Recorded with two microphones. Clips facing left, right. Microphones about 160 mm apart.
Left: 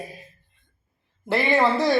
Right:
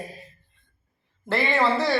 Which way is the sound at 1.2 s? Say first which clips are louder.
Left 2 dB; 15° left (ahead or behind).